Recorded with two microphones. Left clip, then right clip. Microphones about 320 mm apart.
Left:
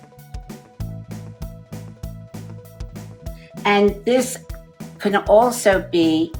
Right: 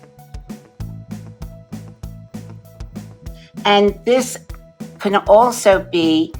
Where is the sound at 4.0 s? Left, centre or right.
Centre.